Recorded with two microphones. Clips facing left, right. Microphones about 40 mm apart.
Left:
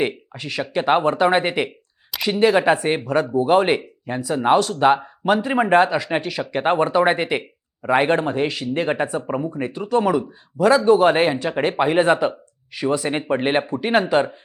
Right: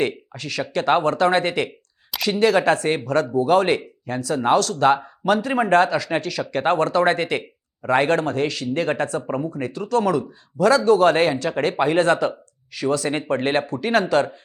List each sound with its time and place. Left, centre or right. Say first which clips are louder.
0.0 s a man's voice: even; centre